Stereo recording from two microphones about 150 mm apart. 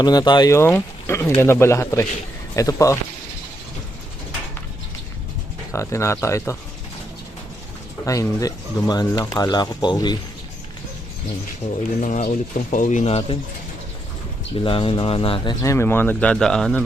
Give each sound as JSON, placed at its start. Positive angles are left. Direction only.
{"t": 0.0, "sound": "speech", "side_deg": 25}
{"t": 0.5, "sound": "speech", "side_deg": 15}
{"t": 5.7, "sound": "speech", "side_deg": 20}
{"t": 8.0, "sound": "speech", "side_deg": 20}
{"t": 11.6, "sound": "speech", "side_deg": 50}
{"t": 14.5, "sound": "speech", "side_deg": 35}
{"t": 15.6, "sound": "speech", "side_deg": 20}